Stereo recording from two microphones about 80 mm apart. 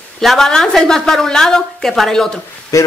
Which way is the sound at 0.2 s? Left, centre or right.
Centre.